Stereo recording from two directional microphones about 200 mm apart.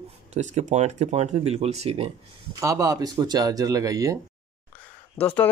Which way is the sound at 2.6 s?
15° right (ahead or behind).